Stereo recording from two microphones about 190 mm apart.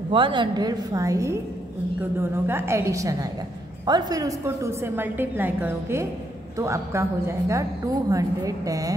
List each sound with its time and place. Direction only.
0.1 s a woman's voice: 25° right (ahead or behind)
2.4 s a woman's voice: 15° right (ahead or behind)